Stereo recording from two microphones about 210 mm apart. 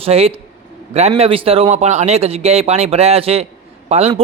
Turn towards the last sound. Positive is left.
turn(degrees=-30)  # may be behind; listen again after turning